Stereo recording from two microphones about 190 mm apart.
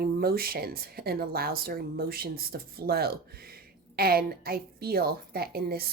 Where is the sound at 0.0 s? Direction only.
55° right (ahead or behind).